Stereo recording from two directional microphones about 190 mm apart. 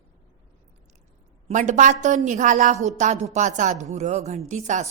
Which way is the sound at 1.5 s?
40° right (ahead or behind).